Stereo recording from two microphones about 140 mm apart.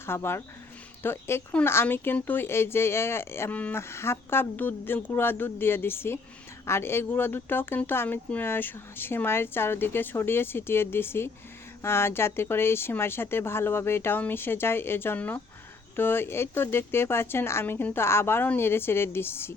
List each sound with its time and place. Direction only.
0.0 s speech: 15° left (ahead or behind)